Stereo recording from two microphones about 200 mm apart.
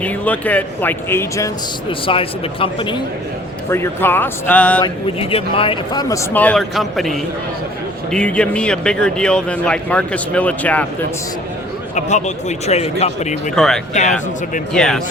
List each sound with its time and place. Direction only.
0.0 s a man's voice: 5° left (ahead or behind)
1.9 s speech: 25° left (ahead or behind)
3.7 s a man's voice: 10° left (ahead or behind)
5.3 s a man's voice: 25° left (ahead or behind); by 10.8 s 5° left (ahead or behind)
11.9 s a man's voice: 35° left (ahead or behind)
13.6 s speech: centre (ahead or behind)
13.9 s a man's voice: 35° left (ahead or behind)
14.7 s speech: 5° left (ahead or behind)